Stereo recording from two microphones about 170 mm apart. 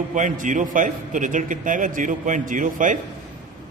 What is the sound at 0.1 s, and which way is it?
A man's voice, 50° right (ahead or behind).